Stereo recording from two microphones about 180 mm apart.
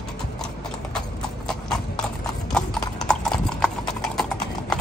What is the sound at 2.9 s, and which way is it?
Clip-clop, 5° left (ahead or behind).